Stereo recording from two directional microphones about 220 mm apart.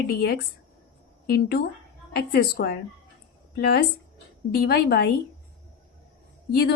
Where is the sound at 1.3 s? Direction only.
45° left (ahead or behind).